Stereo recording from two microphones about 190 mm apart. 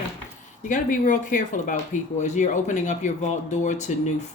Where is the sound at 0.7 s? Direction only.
45° left (ahead or behind).